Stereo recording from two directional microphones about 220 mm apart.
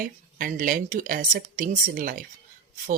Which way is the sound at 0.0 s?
35° right (ahead or behind).